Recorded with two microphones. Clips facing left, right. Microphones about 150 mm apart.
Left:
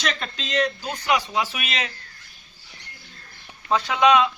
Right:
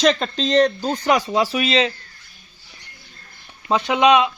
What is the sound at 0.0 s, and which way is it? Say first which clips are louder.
Speech: right 11 dB; 35° right (ahead or behind).